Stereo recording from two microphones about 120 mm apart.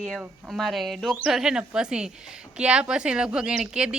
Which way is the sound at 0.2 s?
Centre (ahead or behind).